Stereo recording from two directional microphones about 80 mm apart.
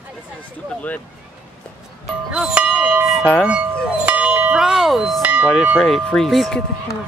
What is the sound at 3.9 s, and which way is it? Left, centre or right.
Bell, centre.